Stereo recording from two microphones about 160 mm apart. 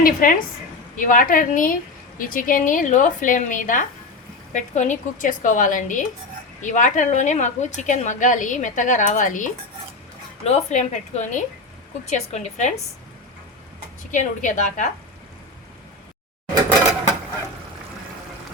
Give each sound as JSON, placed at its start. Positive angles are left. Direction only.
{"t": 0.0, "sound": "a woman's voice", "side_deg": 60}
{"t": 14.1, "sound": "a woman's voice", "side_deg": 50}